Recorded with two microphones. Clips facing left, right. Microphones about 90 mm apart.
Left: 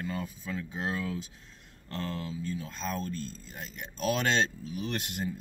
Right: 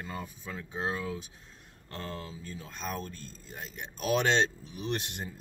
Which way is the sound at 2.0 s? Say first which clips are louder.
Left 4 dB; 30° right (ahead or behind).